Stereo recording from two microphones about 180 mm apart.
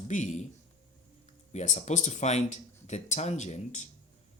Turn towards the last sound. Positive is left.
turn(degrees=40)  # may be behind; listen again after turning